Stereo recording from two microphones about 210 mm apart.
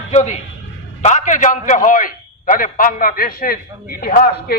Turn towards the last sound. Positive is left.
turn(degrees=45)  # may be behind; listen again after turning